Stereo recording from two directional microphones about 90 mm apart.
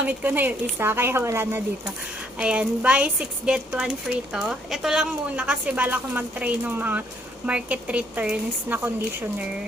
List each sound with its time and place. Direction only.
0.0 s a woman's voice: 15° right (ahead or behind)
2.4 s speech: 15° right (ahead or behind)